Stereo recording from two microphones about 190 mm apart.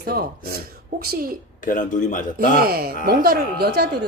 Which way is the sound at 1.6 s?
45° left (ahead or behind).